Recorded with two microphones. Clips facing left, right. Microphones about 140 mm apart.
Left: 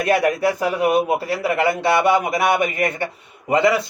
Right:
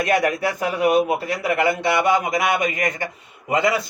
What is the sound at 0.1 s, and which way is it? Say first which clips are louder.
Speech: left 4 dB; 30° left (ahead or behind).